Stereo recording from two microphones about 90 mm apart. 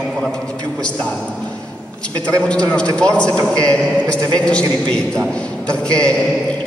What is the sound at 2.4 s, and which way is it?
A man's voice, 15° left (ahead or behind).